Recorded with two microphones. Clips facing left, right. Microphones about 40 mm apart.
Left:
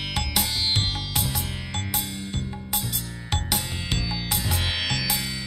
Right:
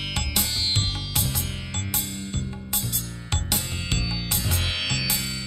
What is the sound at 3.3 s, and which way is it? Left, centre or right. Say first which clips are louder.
Music: left 2 dB; centre.